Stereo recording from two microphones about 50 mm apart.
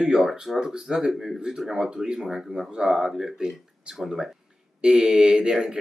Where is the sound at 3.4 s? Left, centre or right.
Centre.